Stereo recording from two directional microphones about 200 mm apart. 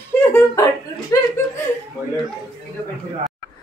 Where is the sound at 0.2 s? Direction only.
15° left (ahead or behind).